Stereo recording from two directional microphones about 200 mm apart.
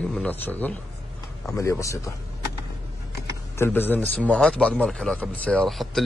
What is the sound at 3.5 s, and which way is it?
A man's voice, 10° left (ahead or behind).